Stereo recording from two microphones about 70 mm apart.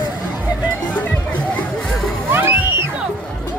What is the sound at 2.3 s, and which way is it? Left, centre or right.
Music, right.